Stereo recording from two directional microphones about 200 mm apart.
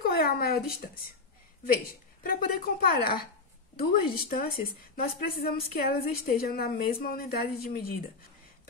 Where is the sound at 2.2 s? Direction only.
45° left (ahead or behind).